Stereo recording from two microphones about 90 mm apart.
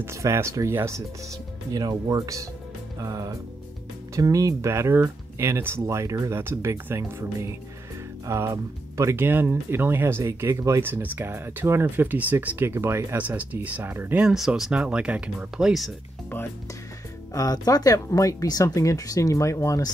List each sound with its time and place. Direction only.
0.0 s speech: 30° right (ahead or behind)
1.7 s speech: 45° right (ahead or behind); by 14.2 s 20° right (ahead or behind)
14.2 s speech: 5° right (ahead or behind)
17.3 s speech: 40° left (ahead or behind)